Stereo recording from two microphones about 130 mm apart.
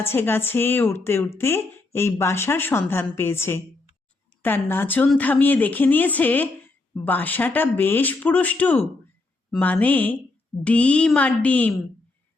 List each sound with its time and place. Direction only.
0.0 s speech: 15° left (ahead or behind)